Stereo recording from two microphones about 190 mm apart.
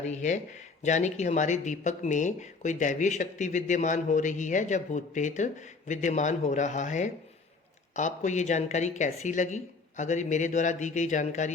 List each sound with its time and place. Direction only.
0.0 s speech: 40° left (ahead or behind)